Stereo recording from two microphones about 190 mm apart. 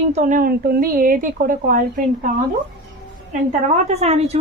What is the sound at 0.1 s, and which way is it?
A woman's voice, 40° right (ahead or behind).